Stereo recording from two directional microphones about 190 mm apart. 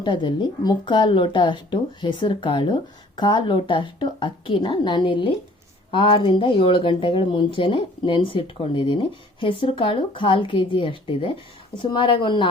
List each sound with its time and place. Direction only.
0.0 s speech: 25° left (ahead or behind)